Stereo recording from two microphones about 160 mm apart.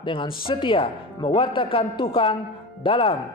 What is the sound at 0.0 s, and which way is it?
A man's voice, 30° left (ahead or behind).